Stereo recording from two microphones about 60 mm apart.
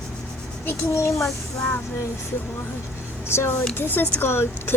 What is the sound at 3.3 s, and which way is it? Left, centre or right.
Speech, left.